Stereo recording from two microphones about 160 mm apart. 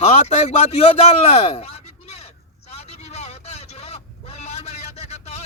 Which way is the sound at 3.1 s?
45° left (ahead or behind).